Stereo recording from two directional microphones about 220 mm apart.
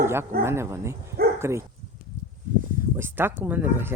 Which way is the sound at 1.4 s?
10° right (ahead or behind).